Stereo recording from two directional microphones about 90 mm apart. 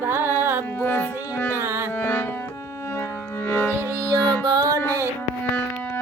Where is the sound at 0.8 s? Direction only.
25° left (ahead or behind).